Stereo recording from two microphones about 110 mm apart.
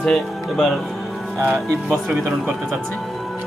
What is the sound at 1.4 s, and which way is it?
Speech, 20° right (ahead or behind).